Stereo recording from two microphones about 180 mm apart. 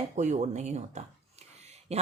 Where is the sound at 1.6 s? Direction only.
35° right (ahead or behind).